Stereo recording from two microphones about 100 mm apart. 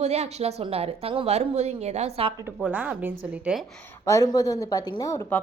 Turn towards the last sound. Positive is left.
turn(degrees=20)  # may be behind; listen again after turning